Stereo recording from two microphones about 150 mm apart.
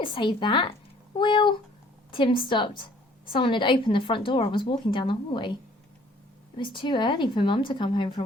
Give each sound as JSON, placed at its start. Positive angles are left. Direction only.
{"t": 0.0, "sound": "a woman's voice", "side_deg": 30}
{"t": 6.6, "sound": "a woman's voice", "side_deg": 30}